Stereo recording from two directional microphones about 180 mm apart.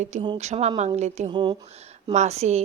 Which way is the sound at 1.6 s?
35° right (ahead or behind).